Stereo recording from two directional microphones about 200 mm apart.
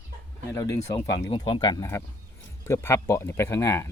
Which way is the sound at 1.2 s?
25° left (ahead or behind).